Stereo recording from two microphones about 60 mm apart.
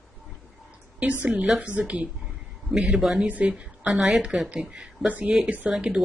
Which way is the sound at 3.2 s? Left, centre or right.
Right.